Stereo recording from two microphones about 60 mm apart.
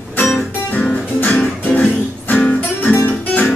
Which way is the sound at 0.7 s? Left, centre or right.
Left.